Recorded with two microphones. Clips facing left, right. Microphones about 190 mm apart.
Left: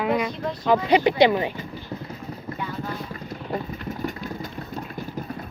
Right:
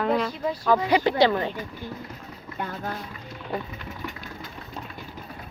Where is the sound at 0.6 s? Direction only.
20° left (ahead or behind).